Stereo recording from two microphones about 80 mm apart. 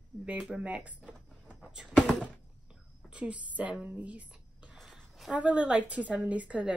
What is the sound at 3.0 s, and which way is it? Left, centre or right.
A woman's voice, centre.